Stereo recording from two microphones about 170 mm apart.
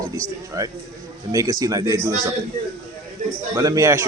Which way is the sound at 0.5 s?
20° right (ahead or behind).